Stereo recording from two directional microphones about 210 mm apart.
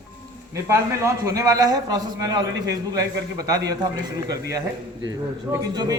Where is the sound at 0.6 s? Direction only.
15° right (ahead or behind).